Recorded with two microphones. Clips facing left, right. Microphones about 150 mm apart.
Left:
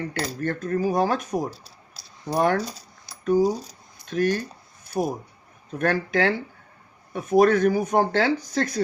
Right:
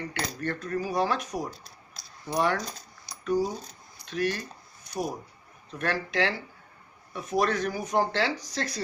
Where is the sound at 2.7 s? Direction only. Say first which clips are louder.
Left 1 dB; 35° left (ahead or behind).